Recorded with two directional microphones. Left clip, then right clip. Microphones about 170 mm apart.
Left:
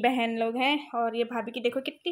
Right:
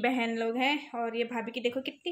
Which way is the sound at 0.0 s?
35° left (ahead or behind).